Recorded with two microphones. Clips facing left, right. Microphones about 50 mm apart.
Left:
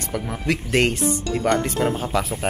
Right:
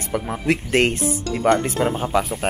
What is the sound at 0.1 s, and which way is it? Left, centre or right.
Speech, centre.